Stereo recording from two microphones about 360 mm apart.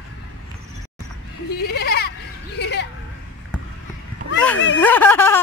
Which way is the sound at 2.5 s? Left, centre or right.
Left.